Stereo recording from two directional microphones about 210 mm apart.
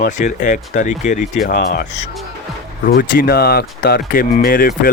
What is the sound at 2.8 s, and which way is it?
Speech, 45° left (ahead or behind).